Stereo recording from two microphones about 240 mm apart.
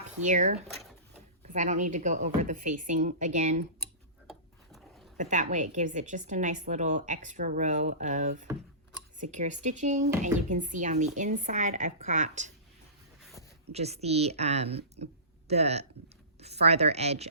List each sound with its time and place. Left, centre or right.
0.2 s a woman's voice: right
4.3 s a sound: centre
5.1 s a woman's voice: right
13.7 s speech: right